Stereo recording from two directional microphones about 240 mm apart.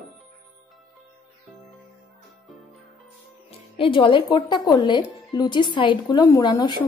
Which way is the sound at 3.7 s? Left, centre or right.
Left.